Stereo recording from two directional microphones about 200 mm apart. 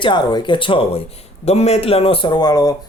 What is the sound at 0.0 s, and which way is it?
A man's voice, 20° left (ahead or behind).